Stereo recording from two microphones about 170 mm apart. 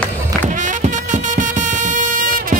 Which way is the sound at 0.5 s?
50° right (ahead or behind).